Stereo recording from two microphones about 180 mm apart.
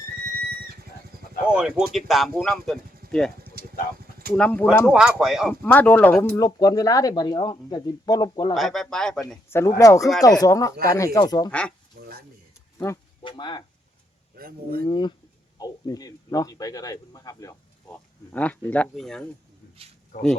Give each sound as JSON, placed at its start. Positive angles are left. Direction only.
{"t": 0.3, "sound": "vehicle", "side_deg": -55}
{"t": 1.5, "sound": "speech", "side_deg": -5}
{"t": 4.4, "sound": "speech", "side_deg": 5}
{"t": 5.6, "sound": "speech", "side_deg": 10}
{"t": 6.3, "sound": "speech", "side_deg": 20}
{"t": 8.5, "sound": "speech", "side_deg": 0}
{"t": 9.5, "sound": "speech", "side_deg": 15}
{"t": 12.0, "sound": "stir", "side_deg": -60}
{"t": 13.2, "sound": "a sound", "side_deg": 25}
{"t": 14.3, "sound": "speech", "side_deg": -55}
{"t": 14.8, "sound": "speech", "side_deg": 25}
{"t": 20.1, "sound": "speech", "side_deg": 40}